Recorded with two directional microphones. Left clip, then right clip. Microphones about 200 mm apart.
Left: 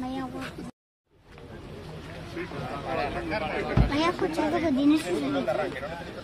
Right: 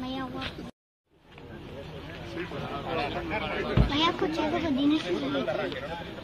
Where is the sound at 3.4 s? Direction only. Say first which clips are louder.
Left 1 dB; 45° left (ahead or behind).